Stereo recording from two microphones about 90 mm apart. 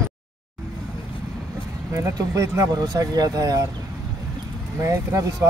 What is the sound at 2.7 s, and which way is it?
Speech, 45° right (ahead or behind).